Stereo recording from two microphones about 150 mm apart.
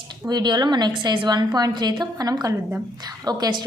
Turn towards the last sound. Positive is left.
turn(degrees=-25)  # may be behind; listen again after turning